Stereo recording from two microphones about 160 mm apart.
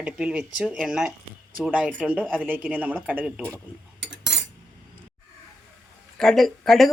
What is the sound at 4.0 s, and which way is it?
Cutlery, 90° right.